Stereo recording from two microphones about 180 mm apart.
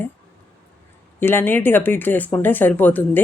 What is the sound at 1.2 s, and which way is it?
Speech, 10° left (ahead or behind).